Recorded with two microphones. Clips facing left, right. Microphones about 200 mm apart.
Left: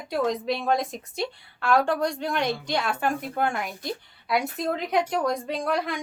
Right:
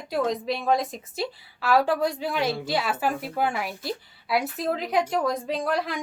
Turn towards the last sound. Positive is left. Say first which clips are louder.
# even
turn(degrees=0)  # may be behind; listen again after turning